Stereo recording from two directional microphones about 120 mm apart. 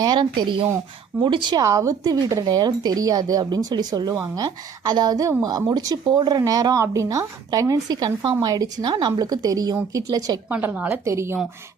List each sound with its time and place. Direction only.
0.0 s speech: 40° right (ahead or behind)
1.6 s speech: 25° right (ahead or behind)
10.5 s a woman's voice: 15° right (ahead or behind)